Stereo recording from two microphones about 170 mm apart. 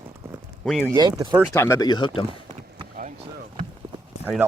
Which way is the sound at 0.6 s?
Centre (ahead or behind).